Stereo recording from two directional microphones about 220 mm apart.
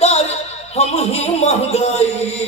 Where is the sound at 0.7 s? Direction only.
30° left (ahead or behind).